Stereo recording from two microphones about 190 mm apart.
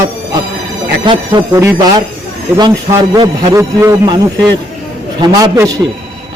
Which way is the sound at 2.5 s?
20° right (ahead or behind).